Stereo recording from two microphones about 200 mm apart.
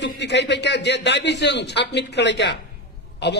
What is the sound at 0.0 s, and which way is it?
A man's voice, 60° left (ahead or behind).